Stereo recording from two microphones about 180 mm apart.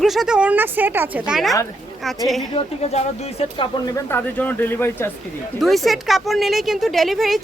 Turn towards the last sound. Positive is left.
turn(degrees=0)  # may be behind; listen again after turning